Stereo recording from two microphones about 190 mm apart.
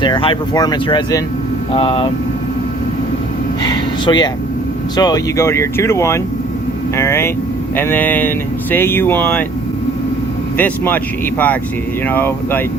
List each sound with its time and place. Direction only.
0.0 s speech: 25° left (ahead or behind)
3.6 s a sound: 20° left (ahead or behind)
4.9 s speech: 20° left (ahead or behind)
10.6 s speech: 10° left (ahead or behind)